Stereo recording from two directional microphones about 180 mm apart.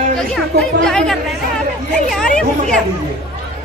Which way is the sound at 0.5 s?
65° right (ahead or behind).